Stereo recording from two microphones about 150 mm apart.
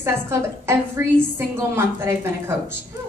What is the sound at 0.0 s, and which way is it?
A woman's voice, 15° right (ahead or behind).